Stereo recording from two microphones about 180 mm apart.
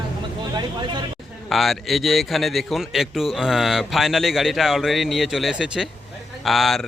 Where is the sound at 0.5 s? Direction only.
25° right (ahead or behind).